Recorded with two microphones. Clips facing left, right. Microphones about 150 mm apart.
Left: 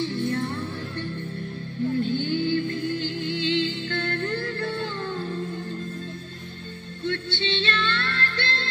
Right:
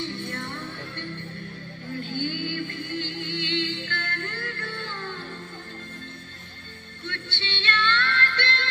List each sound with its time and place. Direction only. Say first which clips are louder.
0.0 s music: left 7 dB; 35° left (ahead or behind)
2.1 s music: left 5 dB; 35° left (ahead or behind)
7.1 s music: left 9 dB; 35° left (ahead or behind)